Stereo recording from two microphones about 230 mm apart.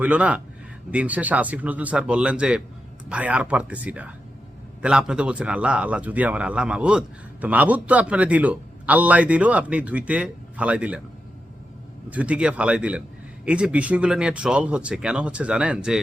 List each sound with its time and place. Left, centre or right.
0.0 s a man's voice: centre
12.1 s speech: centre